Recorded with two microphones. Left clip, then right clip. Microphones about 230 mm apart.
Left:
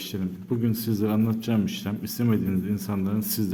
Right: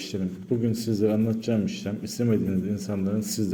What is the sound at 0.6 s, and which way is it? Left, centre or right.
A man's voice, centre.